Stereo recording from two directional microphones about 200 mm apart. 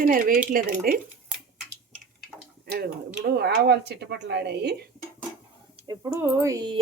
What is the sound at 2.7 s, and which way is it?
Speech, 50° right (ahead or behind).